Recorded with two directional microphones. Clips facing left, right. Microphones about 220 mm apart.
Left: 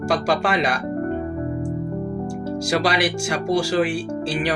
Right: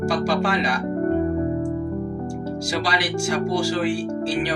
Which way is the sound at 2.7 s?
65° left (ahead or behind).